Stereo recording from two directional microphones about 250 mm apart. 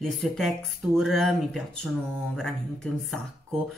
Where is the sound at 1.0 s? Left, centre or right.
Centre.